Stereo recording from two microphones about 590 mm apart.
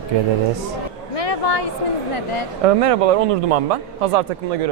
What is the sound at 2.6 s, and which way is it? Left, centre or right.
Speech, right.